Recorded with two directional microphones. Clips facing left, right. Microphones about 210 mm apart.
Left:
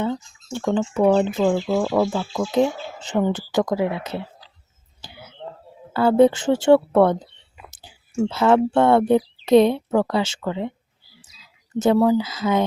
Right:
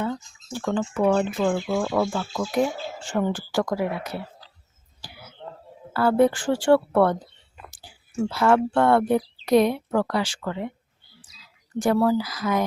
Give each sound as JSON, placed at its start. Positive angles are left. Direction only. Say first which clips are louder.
{"t": 0.0, "sound": "speech", "louder": "left 3 dB", "side_deg": 25}
{"t": 5.0, "sound": "whispering", "louder": "left 2 dB", "side_deg": 25}
{"t": 5.9, "sound": "speech", "louder": "left 4 dB", "side_deg": 25}
{"t": 7.7, "sound": "chewing", "louder": "left 1 dB", "side_deg": 20}
{"t": 8.3, "sound": "speech", "louder": "left 3 dB", "side_deg": 25}
{"t": 11.8, "sound": "speech", "louder": "left 4 dB", "side_deg": 20}